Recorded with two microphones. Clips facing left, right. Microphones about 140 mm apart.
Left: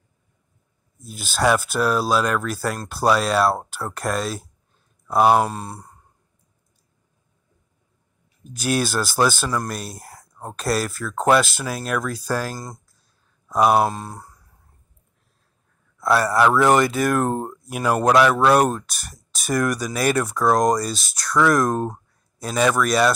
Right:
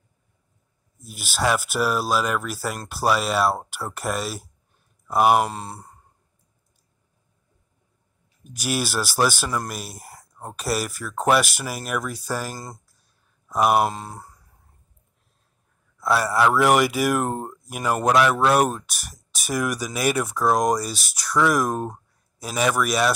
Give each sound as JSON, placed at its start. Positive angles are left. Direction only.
{"t": 1.0, "sound": "speech", "side_deg": -5}
{"t": 5.5, "sound": "speech", "side_deg": -25}
{"t": 8.6, "sound": "speech", "side_deg": -5}
{"t": 12.5, "sound": "speech", "side_deg": -25}
{"t": 13.5, "sound": "a sound", "side_deg": -10}
{"t": 13.8, "sound": "speech", "side_deg": -25}
{"t": 16.1, "sound": "speech", "side_deg": -10}